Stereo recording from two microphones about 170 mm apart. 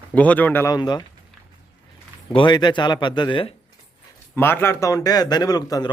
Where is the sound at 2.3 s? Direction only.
25° left (ahead or behind).